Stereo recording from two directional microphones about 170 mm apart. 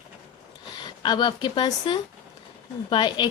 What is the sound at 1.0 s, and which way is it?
A woman's voice, 25° left (ahead or behind).